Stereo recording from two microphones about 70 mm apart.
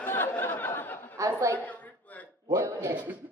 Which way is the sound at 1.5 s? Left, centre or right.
Left.